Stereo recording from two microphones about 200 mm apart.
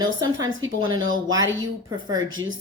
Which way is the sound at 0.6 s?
80° right.